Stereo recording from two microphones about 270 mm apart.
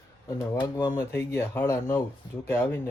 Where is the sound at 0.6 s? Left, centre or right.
Centre.